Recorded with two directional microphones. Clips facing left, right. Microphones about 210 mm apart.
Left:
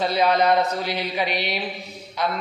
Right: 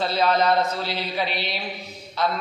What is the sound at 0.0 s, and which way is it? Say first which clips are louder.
A man's voice: left 1 dB; 15° left (ahead or behind).